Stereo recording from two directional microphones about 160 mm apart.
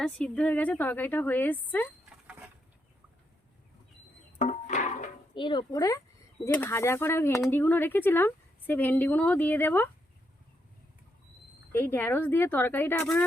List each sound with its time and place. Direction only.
0.0 s a woman's voice: 5° left (ahead or behind)
4.4 s a sound: 50° left (ahead or behind)
5.3 s speech: 30° left (ahead or behind)
6.4 s a woman's voice: 10° left (ahead or behind)
11.7 s a woman's voice: 15° left (ahead or behind)